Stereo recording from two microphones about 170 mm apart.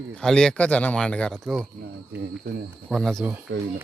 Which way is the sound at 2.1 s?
65° right (ahead or behind).